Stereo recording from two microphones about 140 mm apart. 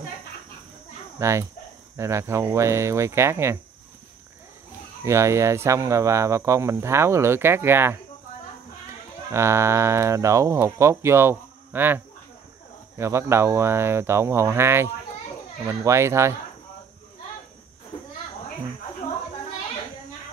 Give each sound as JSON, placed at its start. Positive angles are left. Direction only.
{"t": 1.2, "sound": "speech", "side_deg": -20}
{"t": 5.0, "sound": "speech", "side_deg": -20}
{"t": 9.3, "sound": "speech", "side_deg": -20}